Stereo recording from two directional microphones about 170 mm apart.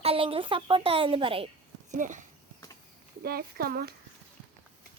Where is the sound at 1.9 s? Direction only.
45° right (ahead or behind).